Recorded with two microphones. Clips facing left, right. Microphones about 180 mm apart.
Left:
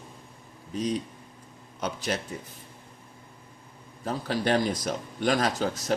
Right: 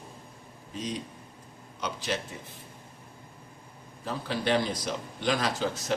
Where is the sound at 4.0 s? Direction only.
45° left (ahead or behind).